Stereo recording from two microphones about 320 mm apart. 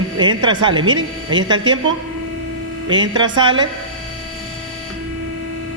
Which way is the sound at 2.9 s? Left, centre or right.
Centre.